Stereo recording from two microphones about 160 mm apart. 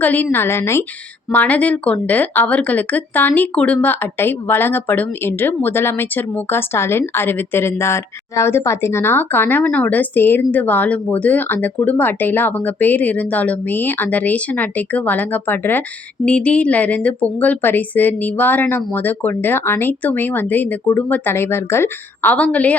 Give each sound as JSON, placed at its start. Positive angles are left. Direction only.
{"t": 0.0, "sound": "speech", "side_deg": 10}